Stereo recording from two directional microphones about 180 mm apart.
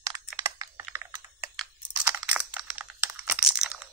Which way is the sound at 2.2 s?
5° right (ahead or behind).